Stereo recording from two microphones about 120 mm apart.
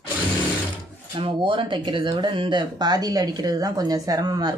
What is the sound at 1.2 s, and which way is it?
Speech, 45° right (ahead or behind).